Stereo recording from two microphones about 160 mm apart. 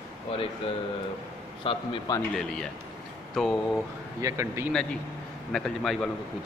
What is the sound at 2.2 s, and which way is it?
A man's voice, 5° left (ahead or behind).